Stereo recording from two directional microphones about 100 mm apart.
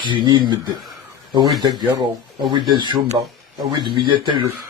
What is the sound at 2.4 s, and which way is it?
Speech, 50° right (ahead or behind).